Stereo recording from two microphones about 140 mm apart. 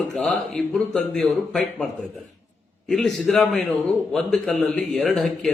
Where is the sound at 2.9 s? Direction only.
Centre (ahead or behind).